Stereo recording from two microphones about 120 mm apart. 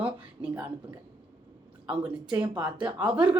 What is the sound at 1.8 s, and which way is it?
Speech, 10° right (ahead or behind).